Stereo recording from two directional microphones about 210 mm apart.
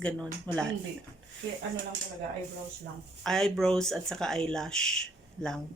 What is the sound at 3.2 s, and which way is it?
Speech, centre (ahead or behind).